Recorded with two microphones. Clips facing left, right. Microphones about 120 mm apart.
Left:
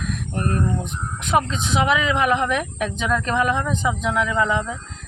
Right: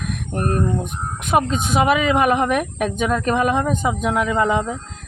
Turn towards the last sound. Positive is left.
turn(degrees=-45)  # may be behind; listen again after turning